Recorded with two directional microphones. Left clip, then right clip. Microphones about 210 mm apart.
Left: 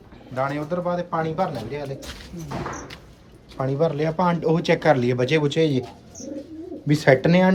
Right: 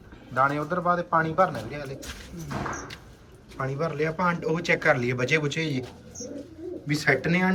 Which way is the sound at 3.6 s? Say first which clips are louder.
Left 5 dB; 15° left (ahead or behind).